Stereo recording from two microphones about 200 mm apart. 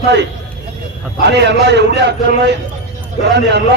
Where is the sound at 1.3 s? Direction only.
60° right (ahead or behind).